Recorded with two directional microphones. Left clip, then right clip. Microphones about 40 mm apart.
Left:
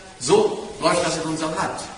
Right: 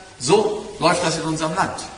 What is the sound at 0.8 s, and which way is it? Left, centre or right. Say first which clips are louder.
Speech: right 2 dB; right.